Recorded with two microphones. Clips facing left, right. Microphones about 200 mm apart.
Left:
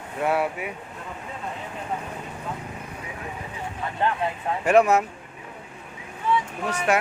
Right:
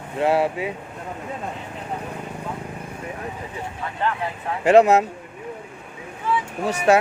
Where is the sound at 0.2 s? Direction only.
30° right (ahead or behind).